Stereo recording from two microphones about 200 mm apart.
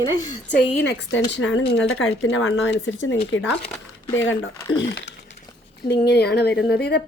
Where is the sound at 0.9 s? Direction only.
65° left (ahead or behind).